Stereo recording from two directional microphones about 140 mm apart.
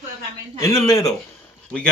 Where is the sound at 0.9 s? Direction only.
25° left (ahead or behind).